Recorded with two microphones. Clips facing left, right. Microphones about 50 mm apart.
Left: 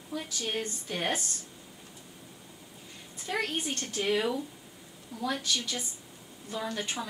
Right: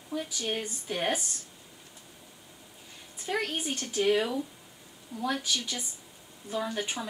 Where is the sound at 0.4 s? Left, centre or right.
Centre.